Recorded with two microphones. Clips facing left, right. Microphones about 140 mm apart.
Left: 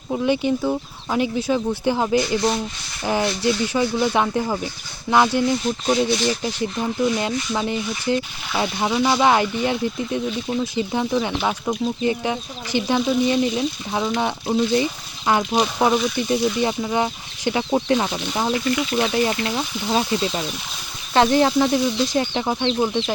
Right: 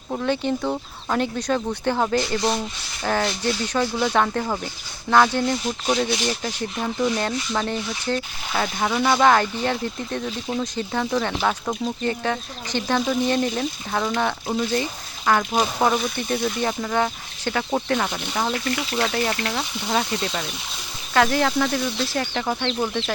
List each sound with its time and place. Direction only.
0.3 s speech: 10° left (ahead or behind)